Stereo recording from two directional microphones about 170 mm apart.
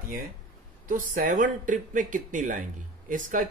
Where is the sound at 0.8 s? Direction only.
55° right (ahead or behind).